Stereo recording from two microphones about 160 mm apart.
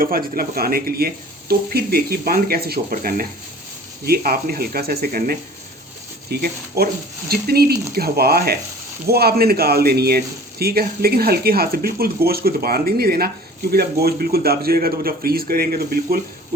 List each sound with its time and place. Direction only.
0.0 s speech: 65° right (ahead or behind)
4.0 s speech: 70° right (ahead or behind)